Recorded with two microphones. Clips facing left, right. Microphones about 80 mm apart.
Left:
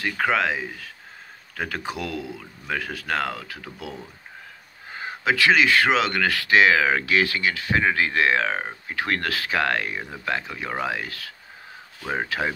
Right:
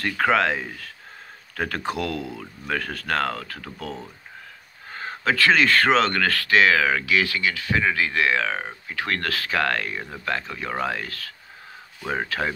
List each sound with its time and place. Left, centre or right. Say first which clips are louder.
0.0 s speech: right 2 dB; centre